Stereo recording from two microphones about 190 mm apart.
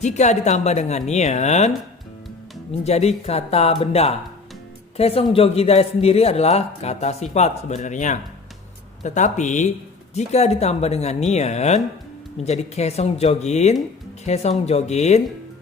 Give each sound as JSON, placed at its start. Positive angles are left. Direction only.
{"t": 0.0, "sound": "a man's voice", "side_deg": 40}
{"t": 2.8, "sound": "a man's voice", "side_deg": 35}